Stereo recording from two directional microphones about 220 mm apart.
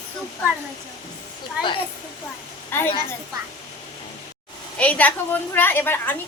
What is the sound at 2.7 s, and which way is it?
Speech, 10° left (ahead or behind).